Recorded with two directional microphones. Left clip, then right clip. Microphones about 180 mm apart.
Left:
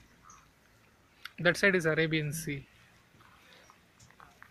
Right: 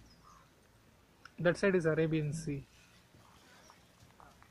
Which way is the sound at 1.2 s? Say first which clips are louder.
Left 5 dB; 10° left (ahead or behind).